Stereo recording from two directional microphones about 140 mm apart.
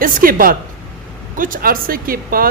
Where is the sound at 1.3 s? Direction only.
75° right (ahead or behind); by 2.4 s 90° right.